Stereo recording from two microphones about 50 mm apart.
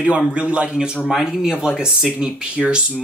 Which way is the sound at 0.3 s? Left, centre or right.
Right.